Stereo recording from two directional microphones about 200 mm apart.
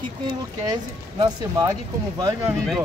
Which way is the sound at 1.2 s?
20° right (ahead or behind).